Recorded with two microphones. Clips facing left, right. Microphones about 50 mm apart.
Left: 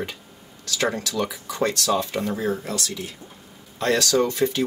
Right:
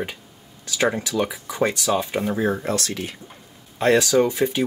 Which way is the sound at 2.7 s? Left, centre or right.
Right.